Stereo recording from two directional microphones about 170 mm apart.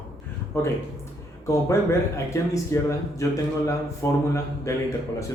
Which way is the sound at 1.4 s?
15° left (ahead or behind).